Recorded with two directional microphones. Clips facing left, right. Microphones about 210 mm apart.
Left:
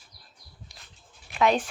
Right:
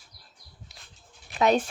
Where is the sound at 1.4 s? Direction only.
40° right (ahead or behind).